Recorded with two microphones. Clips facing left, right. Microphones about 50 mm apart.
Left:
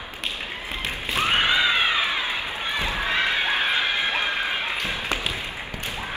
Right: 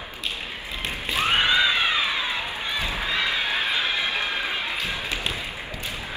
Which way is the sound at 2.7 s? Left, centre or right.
Left.